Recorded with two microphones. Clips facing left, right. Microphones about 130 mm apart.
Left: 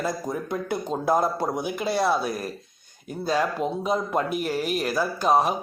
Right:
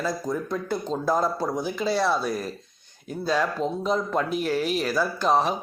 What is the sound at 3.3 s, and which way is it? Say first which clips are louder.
Speech: left 1 dB; 10° left (ahead or behind).